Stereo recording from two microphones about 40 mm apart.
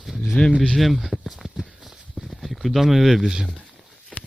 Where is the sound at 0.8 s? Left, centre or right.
Centre.